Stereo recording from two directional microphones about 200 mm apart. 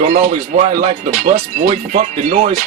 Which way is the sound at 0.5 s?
35° right (ahead or behind).